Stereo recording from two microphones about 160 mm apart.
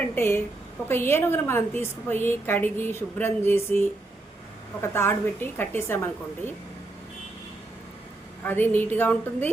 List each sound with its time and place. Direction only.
0.2 s a woman's voice: 15° left (ahead or behind)
8.4 s a woman's voice: 10° left (ahead or behind)